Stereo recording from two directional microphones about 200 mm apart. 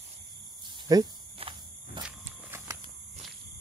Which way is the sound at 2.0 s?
10° right (ahead or behind).